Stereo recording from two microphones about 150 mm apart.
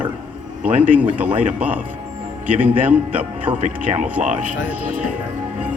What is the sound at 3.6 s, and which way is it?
Speech, 45° right (ahead or behind).